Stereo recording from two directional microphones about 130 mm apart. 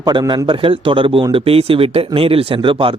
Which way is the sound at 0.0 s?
35° right (ahead or behind).